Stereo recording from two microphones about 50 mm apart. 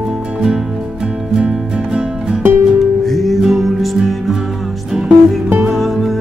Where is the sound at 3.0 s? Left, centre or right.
Centre.